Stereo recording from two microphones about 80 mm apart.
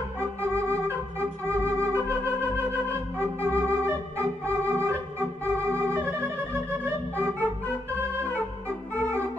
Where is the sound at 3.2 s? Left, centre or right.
Right.